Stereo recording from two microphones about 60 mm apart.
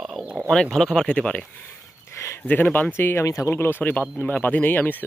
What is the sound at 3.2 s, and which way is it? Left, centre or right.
Speech, left.